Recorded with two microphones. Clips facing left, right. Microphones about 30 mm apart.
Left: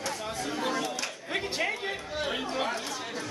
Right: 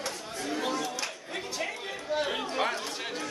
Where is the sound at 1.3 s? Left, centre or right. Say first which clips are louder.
Left 6 dB; left.